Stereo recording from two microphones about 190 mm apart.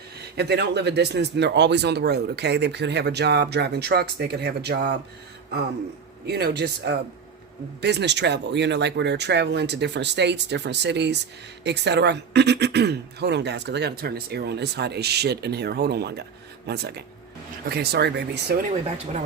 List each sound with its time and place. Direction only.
0.2 s speech: 60° right (ahead or behind)
6.2 s speech: 60° right (ahead or behind)